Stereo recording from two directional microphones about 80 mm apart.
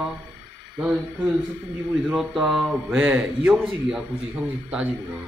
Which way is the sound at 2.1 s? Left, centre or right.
Centre.